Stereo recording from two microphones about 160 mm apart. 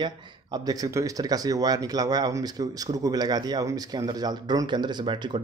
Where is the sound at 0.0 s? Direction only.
25° right (ahead or behind).